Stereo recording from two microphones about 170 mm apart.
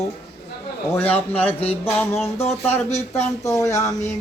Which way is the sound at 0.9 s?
10° left (ahead or behind).